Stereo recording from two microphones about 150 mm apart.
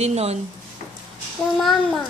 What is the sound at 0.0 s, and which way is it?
Speech, 45° right (ahead or behind).